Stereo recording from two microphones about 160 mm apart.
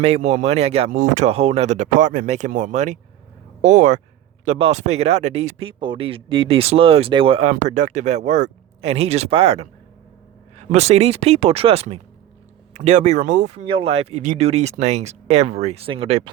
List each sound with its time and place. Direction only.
0.0 s speech: 40° right (ahead or behind)
0.9 s speech: 50° right (ahead or behind)
4.4 s speech: 40° right (ahead or behind)
7.5 s speech: 50° right (ahead or behind)
13.7 s speech: 35° right (ahead or behind)